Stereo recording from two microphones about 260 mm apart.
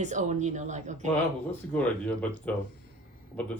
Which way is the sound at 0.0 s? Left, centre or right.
Right.